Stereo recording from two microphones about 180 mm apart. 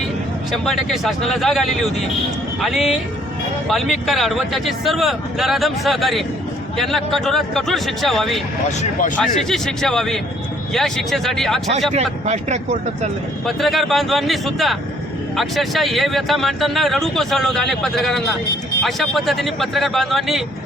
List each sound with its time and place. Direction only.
0.5 s speech: centre (ahead or behind)
8.8 s speech: 45° left (ahead or behind)
9.2 s speech: centre (ahead or behind)
11.9 s speech: 40° right (ahead or behind)
13.4 s speech: centre (ahead or behind)